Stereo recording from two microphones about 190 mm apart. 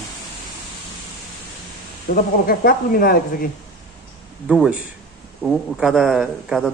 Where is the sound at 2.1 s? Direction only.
55° left (ahead or behind).